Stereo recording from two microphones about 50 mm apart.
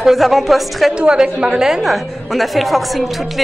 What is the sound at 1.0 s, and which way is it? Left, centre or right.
Speech, centre.